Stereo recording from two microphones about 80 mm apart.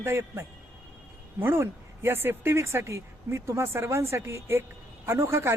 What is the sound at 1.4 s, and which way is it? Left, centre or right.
Speech, right.